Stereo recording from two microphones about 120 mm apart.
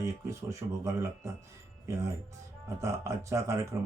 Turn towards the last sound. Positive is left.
turn(degrees=-25)  # may be behind; listen again after turning